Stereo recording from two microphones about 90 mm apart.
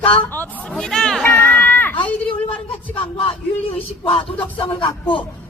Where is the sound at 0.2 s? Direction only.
20° left (ahead or behind).